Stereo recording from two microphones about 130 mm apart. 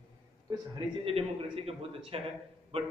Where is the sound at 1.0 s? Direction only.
50° right (ahead or behind).